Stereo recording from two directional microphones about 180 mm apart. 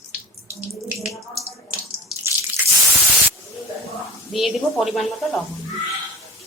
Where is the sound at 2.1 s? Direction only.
Centre (ahead or behind).